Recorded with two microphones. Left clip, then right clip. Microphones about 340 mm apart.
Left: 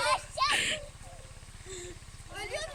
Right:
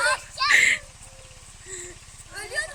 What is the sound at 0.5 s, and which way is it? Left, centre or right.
Children playing, centre.